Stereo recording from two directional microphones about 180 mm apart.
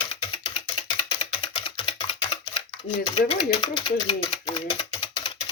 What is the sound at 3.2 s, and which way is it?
Speech, 30° left (ahead or behind).